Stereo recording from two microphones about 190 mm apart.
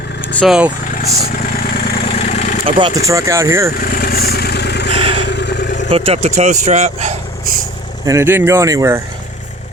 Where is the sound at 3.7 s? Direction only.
50° left (ahead or behind).